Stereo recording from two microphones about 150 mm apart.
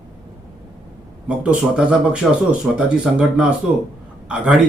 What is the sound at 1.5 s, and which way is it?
Speech, 5° right (ahead or behind).